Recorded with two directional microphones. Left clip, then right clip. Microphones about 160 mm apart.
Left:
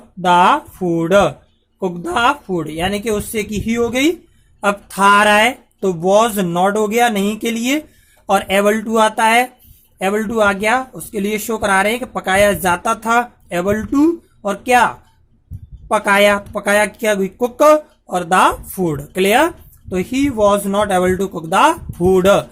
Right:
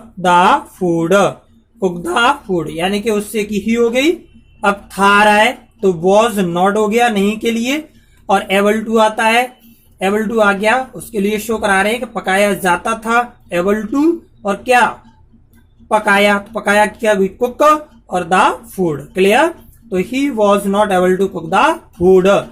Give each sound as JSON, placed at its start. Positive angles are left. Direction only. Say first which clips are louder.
{"t": 0.2, "sound": "speech", "louder": "right 1 dB", "side_deg": 35}
{"t": 15.9, "sound": "speech", "louder": "right 1 dB", "side_deg": 45}